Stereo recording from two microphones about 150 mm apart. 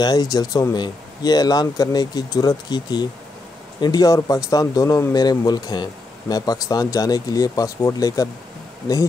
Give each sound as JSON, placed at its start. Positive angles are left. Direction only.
{"t": 0.0, "sound": "speech", "side_deg": 25}